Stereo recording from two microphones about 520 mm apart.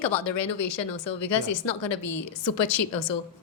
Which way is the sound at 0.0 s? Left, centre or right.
Left.